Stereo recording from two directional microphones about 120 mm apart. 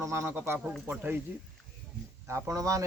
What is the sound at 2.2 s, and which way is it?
Speech, 25° right (ahead or behind).